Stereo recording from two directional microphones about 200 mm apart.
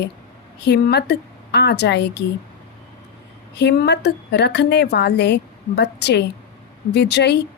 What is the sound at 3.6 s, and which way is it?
A woman's voice, 60° left (ahead or behind).